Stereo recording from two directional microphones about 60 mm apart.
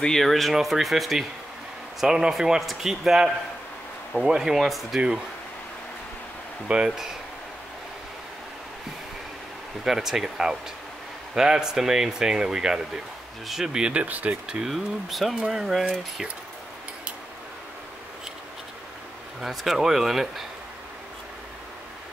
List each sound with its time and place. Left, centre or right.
0.0 s speech: centre
6.7 s speech: centre
9.8 s speech: centre
14.0 s speech: right
14.7 s speech: centre
19.4 s speech: centre